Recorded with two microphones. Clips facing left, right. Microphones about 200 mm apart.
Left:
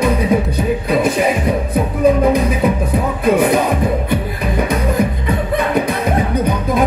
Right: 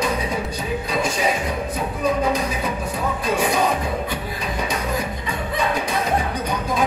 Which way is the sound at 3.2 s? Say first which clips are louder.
Left 7 dB; 55° left (ahead or behind).